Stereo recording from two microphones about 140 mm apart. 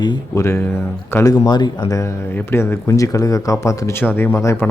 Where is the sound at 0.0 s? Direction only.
30° left (ahead or behind).